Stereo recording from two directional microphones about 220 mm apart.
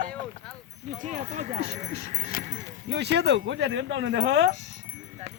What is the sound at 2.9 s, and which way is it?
Speech, 50° right (ahead or behind).